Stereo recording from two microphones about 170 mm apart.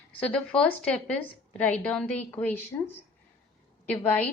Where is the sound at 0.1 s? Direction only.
5° left (ahead or behind).